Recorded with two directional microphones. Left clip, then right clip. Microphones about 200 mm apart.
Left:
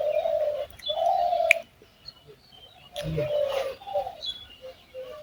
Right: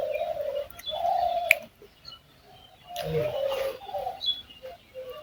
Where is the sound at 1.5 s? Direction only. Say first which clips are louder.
Right 1 dB; 10° right (ahead or behind).